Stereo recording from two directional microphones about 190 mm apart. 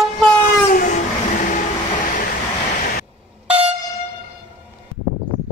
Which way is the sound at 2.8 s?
45° left (ahead or behind).